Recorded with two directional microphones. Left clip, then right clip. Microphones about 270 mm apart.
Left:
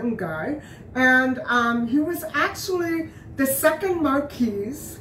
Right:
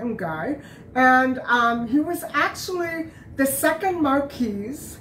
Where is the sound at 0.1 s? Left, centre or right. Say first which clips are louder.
Even; centre.